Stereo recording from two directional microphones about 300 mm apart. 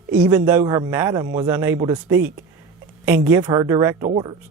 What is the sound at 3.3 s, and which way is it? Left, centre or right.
Speech, centre.